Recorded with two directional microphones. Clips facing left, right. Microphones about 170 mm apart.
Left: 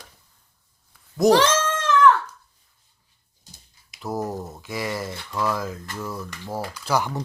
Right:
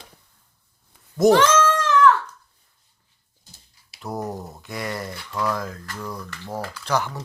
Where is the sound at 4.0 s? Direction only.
Centre (ahead or behind).